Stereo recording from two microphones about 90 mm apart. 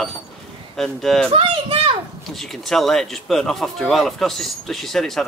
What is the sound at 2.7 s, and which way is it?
Speech, 5° left (ahead or behind).